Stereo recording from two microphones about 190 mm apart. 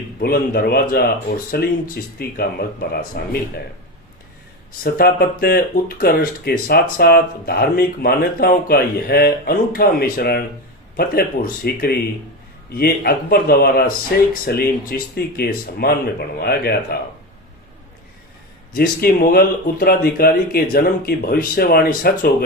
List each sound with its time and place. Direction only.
0.2 s speech: 55° left (ahead or behind)
4.8 s speech: 55° left (ahead or behind)
18.8 s speech: 50° left (ahead or behind)